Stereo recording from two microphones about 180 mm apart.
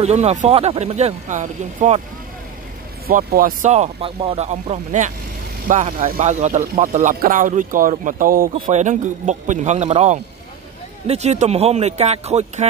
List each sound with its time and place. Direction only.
0.0 s speech: 35° right (ahead or behind)
3.1 s speech: 55° right (ahead or behind)
3.7 s speech: 35° right (ahead or behind)